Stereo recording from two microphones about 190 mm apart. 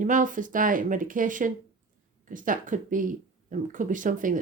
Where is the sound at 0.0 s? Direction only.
45° right (ahead or behind).